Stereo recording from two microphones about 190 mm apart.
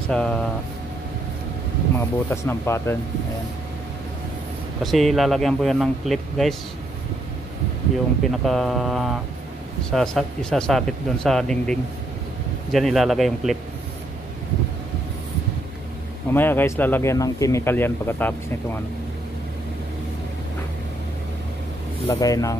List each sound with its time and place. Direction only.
0.1 s speech: 5° left (ahead or behind)
2.0 s speech: 10° left (ahead or behind)
4.8 s speech: centre (ahead or behind)
8.3 s speech: centre (ahead or behind)
16.3 s speech: 10° left (ahead or behind)
22.0 s speech: 20° left (ahead or behind)